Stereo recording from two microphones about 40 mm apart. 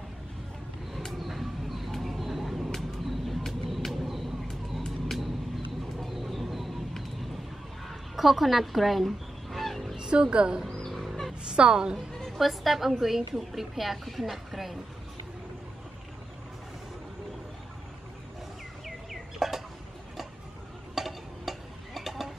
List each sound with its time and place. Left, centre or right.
1.2 s bird: centre
2.7 s vehicle: centre
5.9 s bird: centre
8.2 s fowl: centre
9.9 s speech: centre
10.9 s a sound: centre
11.5 s a woman's voice: right
12.1 s music: centre
12.4 s a woman's voice: centre
19.3 s a sound: centre
20.9 s a sound: centre